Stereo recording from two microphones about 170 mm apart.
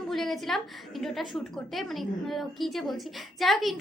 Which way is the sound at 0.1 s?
Centre (ahead or behind).